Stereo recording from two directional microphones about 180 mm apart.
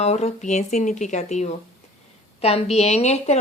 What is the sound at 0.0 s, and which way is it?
A woman's voice, 35° left (ahead or behind).